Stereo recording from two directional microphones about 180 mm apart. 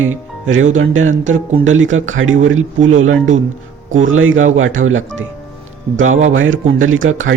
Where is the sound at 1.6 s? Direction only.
90° right.